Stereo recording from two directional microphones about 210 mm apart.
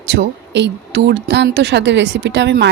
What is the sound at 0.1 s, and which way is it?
Speech, 55° right (ahead or behind).